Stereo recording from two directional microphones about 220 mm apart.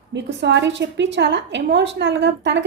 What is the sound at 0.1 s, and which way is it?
A woman's voice, 50° right (ahead or behind).